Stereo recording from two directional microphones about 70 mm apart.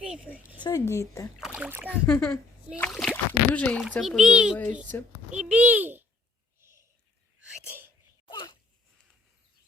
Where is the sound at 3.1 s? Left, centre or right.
Left.